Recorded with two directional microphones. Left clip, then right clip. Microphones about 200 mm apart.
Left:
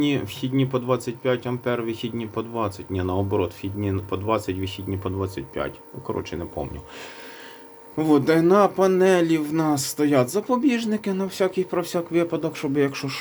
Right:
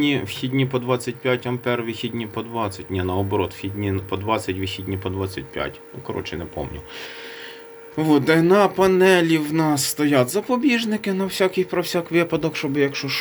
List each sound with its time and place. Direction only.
0.0 s speech: 5° right (ahead or behind)
7.9 s speech: 5° right (ahead or behind)